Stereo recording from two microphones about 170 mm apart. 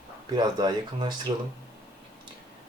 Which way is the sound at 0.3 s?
25° right (ahead or behind).